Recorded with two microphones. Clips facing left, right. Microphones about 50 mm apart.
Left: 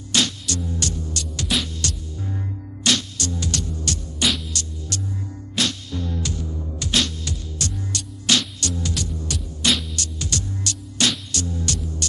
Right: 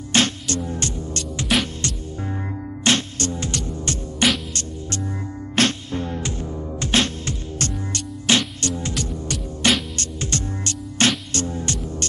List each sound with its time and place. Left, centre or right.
0.1 s music: right
2.8 s music: right
9.3 s music: centre
9.9 s music: right